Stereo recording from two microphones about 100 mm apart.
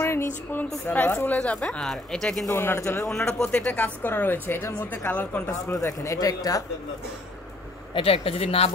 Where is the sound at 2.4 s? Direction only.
25° left (ahead or behind).